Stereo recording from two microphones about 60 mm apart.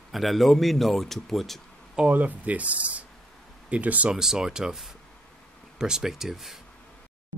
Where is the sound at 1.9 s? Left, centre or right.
Right.